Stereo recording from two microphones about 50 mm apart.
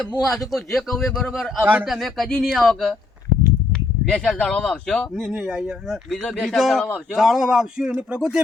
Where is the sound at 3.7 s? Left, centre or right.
Centre.